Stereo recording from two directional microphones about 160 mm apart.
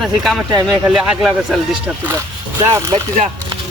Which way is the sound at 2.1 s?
20° right (ahead or behind).